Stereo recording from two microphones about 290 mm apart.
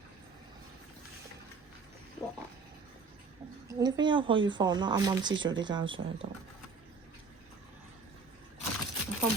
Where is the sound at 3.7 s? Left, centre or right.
Centre.